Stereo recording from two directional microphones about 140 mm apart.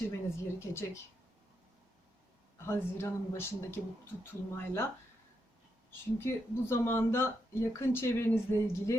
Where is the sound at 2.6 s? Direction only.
20° left (ahead or behind).